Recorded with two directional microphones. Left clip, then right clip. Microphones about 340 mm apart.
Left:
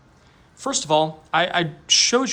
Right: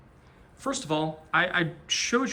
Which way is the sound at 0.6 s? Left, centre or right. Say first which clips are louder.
Left 9 dB; centre.